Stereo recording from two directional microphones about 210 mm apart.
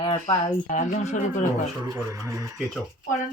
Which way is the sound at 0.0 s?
20° left (ahead or behind).